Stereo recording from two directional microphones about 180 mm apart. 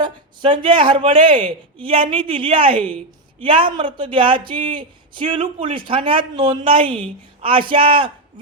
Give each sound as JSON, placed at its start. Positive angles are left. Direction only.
{"t": 0.0, "sound": "speech", "side_deg": -25}